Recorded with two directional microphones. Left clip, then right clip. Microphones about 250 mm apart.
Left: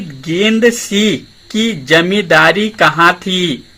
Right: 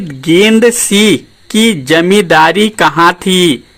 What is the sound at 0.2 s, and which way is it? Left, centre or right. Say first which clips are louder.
Speech: right 5 dB; right.